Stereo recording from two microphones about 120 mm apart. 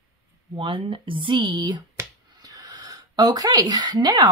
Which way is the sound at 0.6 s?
45° right (ahead or behind).